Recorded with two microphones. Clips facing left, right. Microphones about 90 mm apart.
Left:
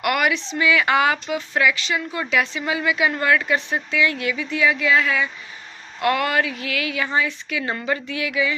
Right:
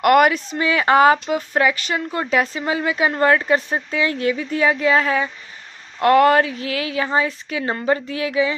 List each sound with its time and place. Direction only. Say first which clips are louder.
0.0 s speech: right 7 dB; 45° right (ahead or behind)